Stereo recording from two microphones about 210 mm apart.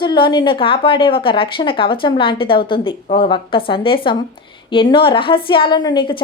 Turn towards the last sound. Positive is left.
turn(degrees=25)  # may be behind; listen again after turning